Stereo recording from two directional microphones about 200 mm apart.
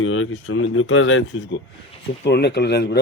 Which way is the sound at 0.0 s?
85° left.